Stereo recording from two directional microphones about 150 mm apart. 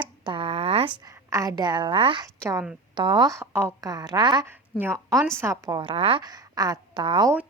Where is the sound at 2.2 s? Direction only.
20° right (ahead or behind).